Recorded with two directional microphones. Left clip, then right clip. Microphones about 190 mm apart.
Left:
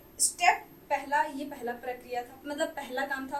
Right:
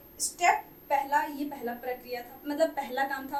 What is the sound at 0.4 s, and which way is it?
A child's voice, 15° right (ahead or behind).